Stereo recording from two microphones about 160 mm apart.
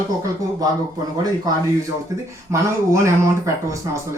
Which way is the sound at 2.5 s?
20° right (ahead or behind).